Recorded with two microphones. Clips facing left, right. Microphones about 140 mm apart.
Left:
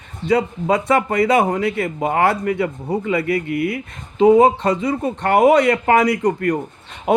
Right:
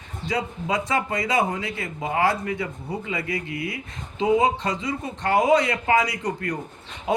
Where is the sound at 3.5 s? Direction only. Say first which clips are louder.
Left 10 dB; 25° right (ahead or behind).